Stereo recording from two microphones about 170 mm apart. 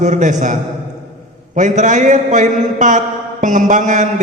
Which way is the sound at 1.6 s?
45° right (ahead or behind).